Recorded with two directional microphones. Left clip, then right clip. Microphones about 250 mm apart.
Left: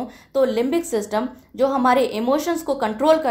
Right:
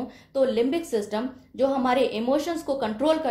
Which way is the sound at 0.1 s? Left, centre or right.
Left.